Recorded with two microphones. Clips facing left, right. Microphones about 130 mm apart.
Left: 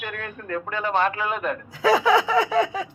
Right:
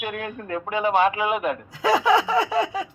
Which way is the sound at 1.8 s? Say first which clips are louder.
Left 1 dB; centre (ahead or behind).